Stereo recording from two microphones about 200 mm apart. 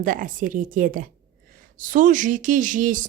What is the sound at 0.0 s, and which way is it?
A woman's voice, 45° right (ahead or behind).